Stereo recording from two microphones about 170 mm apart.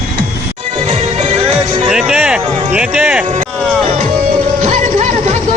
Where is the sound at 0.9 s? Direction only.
40° right (ahead or behind).